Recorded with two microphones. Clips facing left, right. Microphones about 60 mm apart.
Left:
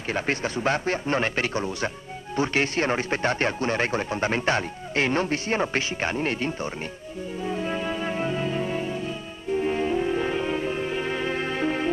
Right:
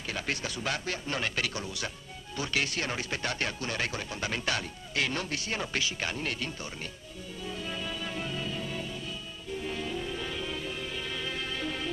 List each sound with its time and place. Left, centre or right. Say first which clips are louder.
0.1 s speech: left 8 dB; left
7.4 s music: left 9 dB; left